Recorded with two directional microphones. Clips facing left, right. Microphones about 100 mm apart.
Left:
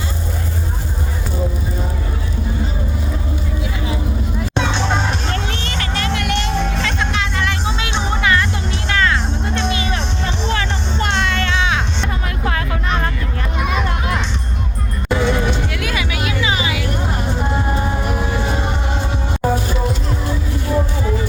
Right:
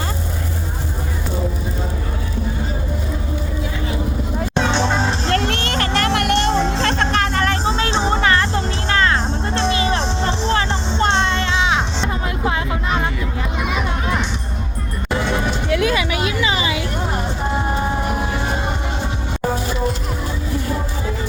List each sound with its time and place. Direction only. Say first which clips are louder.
5.3 s a sound: right 4 dB; 60° right (ahead or behind)
6.1 s music: right 2 dB; 55° right (ahead or behind)
6.5 s music: right 3 dB; 30° right (ahead or behind)
6.9 s music: right 3 dB; 45° right (ahead or behind); by 13.1 s 15° right (ahead or behind)
13.6 s a sound: left 2 dB; 5° right (ahead or behind)
15.7 s music: right 5 dB; 25° right (ahead or behind)